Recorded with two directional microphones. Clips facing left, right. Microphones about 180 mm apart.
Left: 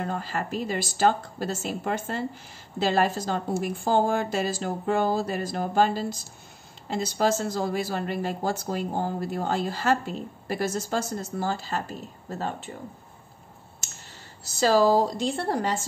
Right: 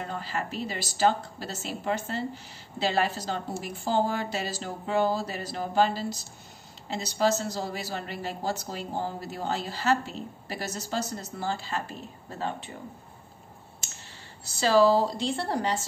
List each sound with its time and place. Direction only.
0.0 s a woman's voice: 50° left (ahead or behind)
14.6 s a woman's voice: 45° left (ahead or behind)